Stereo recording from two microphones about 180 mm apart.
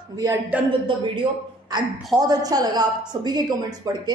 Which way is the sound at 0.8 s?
25° right (ahead or behind).